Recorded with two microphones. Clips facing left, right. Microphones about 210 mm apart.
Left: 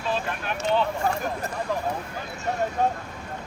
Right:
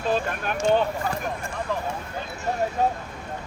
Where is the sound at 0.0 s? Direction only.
45° right (ahead or behind).